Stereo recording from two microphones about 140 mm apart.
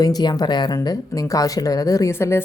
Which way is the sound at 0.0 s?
30° left (ahead or behind).